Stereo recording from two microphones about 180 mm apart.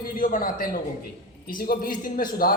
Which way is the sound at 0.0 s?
50° left (ahead or behind).